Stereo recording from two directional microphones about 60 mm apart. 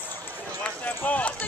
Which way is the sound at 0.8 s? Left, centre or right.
Left.